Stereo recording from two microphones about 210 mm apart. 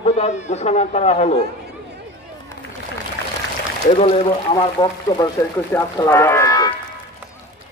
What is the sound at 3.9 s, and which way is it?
Speech, 30° left (ahead or behind).